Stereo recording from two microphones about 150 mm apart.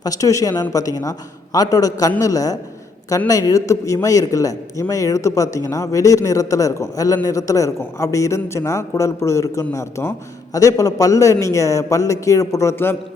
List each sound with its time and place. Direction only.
0.0 s a man's voice: 25° left (ahead or behind)